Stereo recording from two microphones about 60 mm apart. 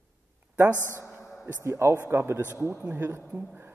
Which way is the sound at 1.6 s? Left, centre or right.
Right.